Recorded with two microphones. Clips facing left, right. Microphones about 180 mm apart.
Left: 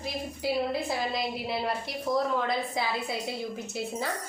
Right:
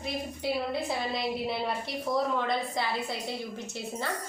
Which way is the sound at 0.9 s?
Centre (ahead or behind).